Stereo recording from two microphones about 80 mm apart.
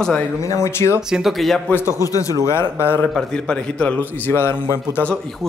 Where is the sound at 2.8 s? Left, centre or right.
Left.